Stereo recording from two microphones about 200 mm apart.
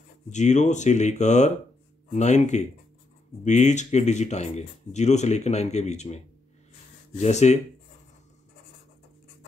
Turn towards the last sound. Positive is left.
turn(degrees=35)  # may be behind; listen again after turning